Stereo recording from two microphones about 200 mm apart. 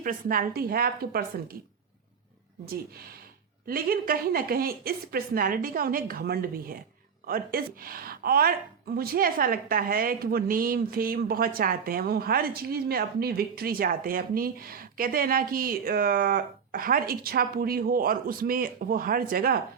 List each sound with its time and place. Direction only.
0.0 s a woman's voice: 45° right (ahead or behind)
3.7 s a woman's voice: 45° right (ahead or behind)